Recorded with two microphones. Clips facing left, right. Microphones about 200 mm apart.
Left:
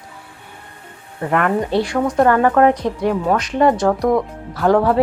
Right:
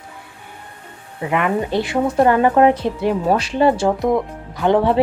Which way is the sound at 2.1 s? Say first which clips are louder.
Even; 20° right (ahead or behind).